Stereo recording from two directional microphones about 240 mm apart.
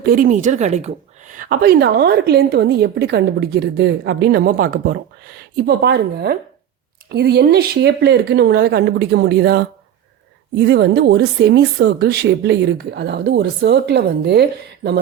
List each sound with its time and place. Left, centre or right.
0.0 s speech: right